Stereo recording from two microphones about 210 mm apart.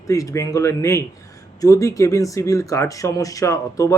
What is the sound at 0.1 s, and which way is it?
Speech, 15° left (ahead or behind).